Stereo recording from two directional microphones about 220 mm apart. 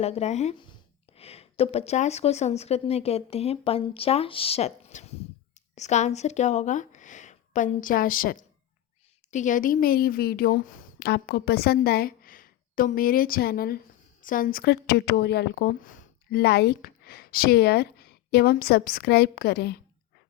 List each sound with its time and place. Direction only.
0.0 s a woman's voice: 30° left (ahead or behind); by 19.8 s 45° left (ahead or behind)